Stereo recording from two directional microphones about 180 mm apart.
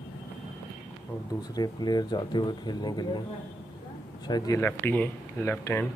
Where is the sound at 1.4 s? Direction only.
20° left (ahead or behind).